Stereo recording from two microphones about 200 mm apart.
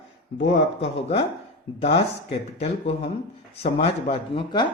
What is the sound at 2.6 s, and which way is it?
Speech, 30° left (ahead or behind).